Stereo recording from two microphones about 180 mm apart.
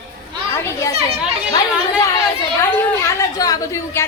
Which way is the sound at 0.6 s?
15° left (ahead or behind).